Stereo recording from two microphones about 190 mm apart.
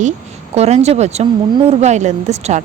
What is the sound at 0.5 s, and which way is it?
Speech, 35° right (ahead or behind).